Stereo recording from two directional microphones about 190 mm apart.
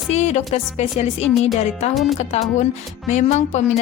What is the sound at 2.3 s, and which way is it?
Speech, 35° left (ahead or behind).